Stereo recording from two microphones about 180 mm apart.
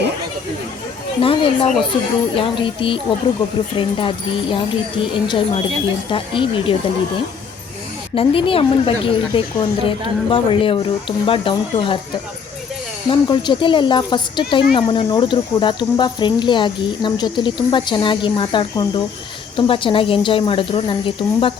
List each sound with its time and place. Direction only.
1.2 s speech: 30° left (ahead or behind)
8.1 s speech: 30° left (ahead or behind)
13.1 s speech: 25° left (ahead or behind)